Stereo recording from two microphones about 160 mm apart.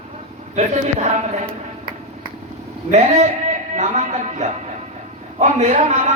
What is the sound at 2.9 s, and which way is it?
A man's voice, 45° right (ahead or behind).